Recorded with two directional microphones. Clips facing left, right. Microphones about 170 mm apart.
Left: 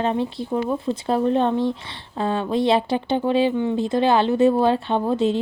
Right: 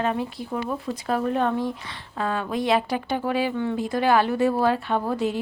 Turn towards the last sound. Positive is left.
turn(degrees=25)  # may be behind; listen again after turning